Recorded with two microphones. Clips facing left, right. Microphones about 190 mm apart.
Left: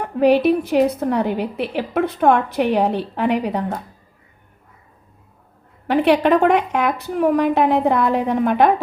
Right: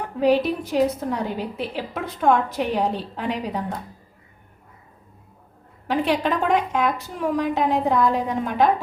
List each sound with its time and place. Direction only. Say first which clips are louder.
0.0 s a woman's voice: left 5 dB; 65° left (ahead or behind)
5.9 s a woman's voice: left 7 dB; 65° left (ahead or behind)